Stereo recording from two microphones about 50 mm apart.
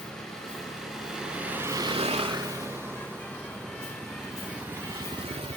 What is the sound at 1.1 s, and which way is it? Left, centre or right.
Vehicle, centre.